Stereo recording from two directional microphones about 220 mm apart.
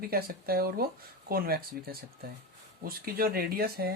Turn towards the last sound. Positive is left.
turn(degrees=-45)  # may be behind; listen again after turning